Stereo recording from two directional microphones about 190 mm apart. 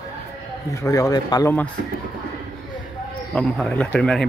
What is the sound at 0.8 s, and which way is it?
Speech, 15° left (ahead or behind).